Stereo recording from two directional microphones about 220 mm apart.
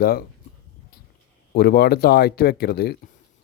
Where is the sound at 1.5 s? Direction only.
45° left (ahead or behind).